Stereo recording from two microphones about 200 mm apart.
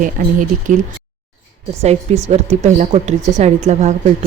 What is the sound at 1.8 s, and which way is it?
Speech, 35° right (ahead or behind).